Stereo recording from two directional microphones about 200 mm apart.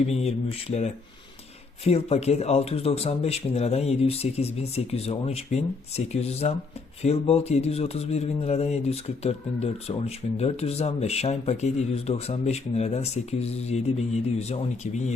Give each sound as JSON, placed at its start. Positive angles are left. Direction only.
{"t": 0.1, "sound": "speech", "side_deg": 30}